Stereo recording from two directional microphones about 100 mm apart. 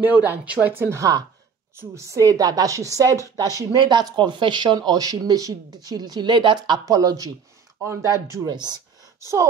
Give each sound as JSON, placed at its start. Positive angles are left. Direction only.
{"t": 0.0, "sound": "speech", "side_deg": -20}
{"t": 8.5, "sound": "speech", "side_deg": -45}
{"t": 9.2, "sound": "speech", "side_deg": -30}